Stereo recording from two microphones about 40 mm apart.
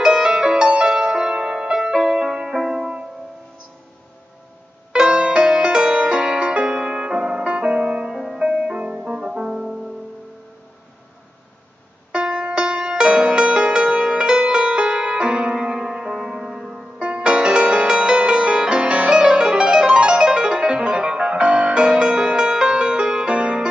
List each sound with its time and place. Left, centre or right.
0.0 s music: centre
2.5 s music: centre
4.9 s music: right; by 8.7 s centre
9.0 s music: centre
12.1 s music: right
17.0 s music: right